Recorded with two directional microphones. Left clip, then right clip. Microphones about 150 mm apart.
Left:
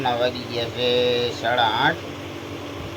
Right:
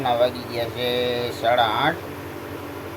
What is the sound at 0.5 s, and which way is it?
Speech, 5° left (ahead or behind).